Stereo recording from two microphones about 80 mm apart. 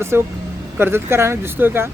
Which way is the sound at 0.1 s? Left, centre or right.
Right.